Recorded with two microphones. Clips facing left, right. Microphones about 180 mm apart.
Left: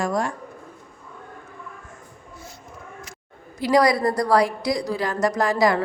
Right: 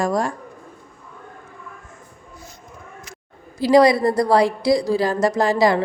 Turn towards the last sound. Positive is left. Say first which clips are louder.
# right 3 dB
turn(degrees=-25)  # may be behind; listen again after turning